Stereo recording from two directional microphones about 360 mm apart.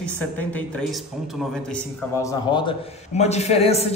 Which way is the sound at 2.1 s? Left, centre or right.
Centre.